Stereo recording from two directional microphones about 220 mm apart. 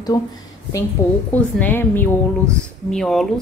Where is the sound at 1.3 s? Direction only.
10° left (ahead or behind).